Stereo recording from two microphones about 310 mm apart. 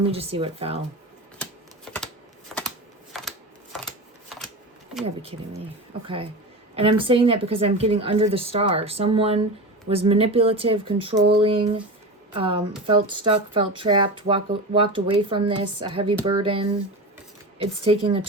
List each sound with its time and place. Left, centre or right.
0.0 s a woman's voice: centre
2.6 s a sound: centre
5.0 s a woman's voice: centre
6.7 s a woman's voice: centre